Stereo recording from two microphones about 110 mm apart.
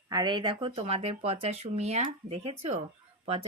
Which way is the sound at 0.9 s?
70° right (ahead or behind).